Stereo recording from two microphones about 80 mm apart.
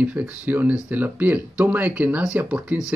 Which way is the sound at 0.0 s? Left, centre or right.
Right.